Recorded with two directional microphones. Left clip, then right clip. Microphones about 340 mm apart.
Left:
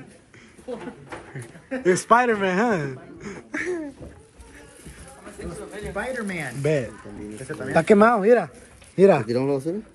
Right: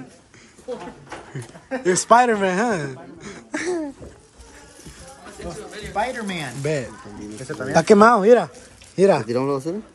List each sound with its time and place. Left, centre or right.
1.8 s speech: centre
3.6 s cough: centre
5.9 s speech: right
6.6 s speech: centre
7.3 s speech: right
7.7 s speech: centre